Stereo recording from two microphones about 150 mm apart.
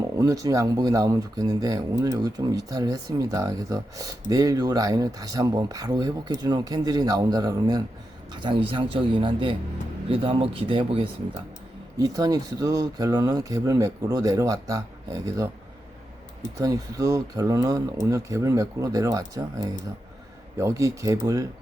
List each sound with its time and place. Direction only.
0.2 s speech: 25° right (ahead or behind)
16.6 s speech: 25° right (ahead or behind)